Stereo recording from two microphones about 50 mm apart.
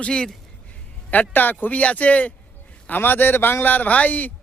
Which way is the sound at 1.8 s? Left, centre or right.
Left.